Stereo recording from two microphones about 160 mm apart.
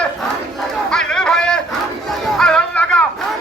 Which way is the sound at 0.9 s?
5° left (ahead or behind).